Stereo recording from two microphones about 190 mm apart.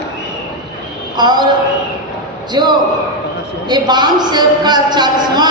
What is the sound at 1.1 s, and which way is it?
Speech, 20° right (ahead or behind).